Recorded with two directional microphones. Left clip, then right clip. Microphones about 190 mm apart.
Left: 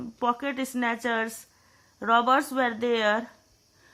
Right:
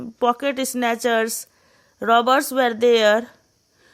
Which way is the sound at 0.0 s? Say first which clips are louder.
Right 7 dB; 40° right (ahead or behind).